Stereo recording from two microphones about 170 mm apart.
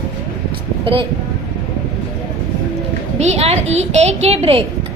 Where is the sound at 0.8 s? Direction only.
30° right (ahead or behind).